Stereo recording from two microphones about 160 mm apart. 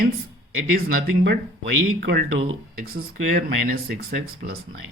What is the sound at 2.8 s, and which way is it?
Speech, 70° right (ahead or behind).